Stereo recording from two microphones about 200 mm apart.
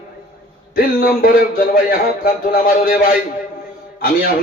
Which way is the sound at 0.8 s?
50° left (ahead or behind).